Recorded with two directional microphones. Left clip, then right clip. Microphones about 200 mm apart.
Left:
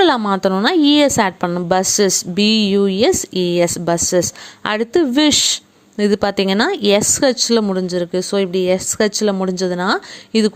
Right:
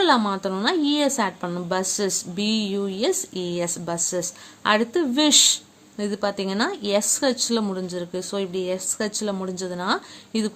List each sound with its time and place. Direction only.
0.0 s a woman's voice: 40° left (ahead or behind)